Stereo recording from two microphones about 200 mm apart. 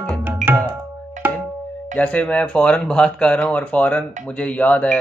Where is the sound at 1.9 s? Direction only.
5° left (ahead or behind).